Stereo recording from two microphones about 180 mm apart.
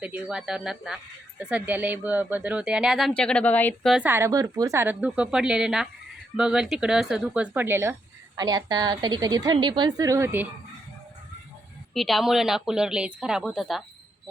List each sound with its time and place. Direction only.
0.0 s speech: 5° right (ahead or behind); by 3.9 s 10° left (ahead or behind)
3.9 s a woman's voice: 10° right (ahead or behind)
11.9 s speech: centre (ahead or behind)